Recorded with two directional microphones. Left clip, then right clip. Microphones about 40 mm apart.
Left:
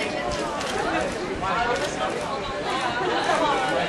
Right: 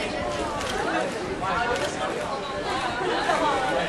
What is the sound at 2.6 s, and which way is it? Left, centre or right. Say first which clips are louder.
Chatter: left 2 dB; left.